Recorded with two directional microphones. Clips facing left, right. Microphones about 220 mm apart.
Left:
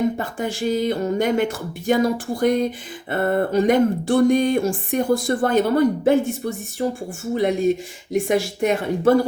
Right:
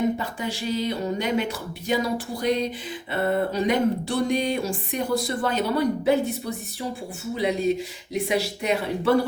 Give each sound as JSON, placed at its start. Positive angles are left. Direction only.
{"t": 0.2, "sound": "speech", "side_deg": 50}